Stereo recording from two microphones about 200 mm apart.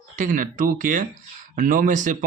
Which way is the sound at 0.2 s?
40° right (ahead or behind).